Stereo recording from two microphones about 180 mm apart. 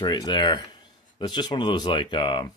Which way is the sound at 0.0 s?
25° left (ahead or behind).